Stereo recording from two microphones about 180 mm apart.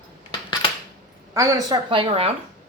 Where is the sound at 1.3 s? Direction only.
20° right (ahead or behind); by 2.3 s 35° right (ahead or behind).